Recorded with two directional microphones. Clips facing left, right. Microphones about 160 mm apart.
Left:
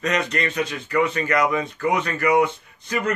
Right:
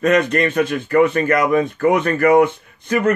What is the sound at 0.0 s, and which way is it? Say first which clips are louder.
Speech: right 8 dB; 50° right (ahead or behind).